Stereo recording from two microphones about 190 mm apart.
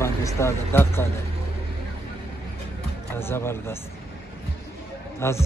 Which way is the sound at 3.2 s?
10° left (ahead or behind).